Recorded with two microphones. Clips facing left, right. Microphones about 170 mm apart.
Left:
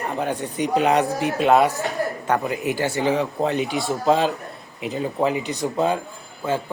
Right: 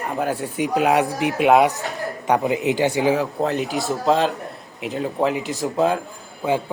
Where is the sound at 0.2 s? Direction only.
5° right (ahead or behind).